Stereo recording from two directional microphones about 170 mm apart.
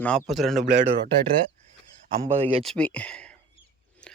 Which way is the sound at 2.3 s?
35° right (ahead or behind).